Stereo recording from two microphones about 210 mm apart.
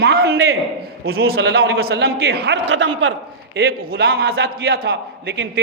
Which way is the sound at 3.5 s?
50° right (ahead or behind).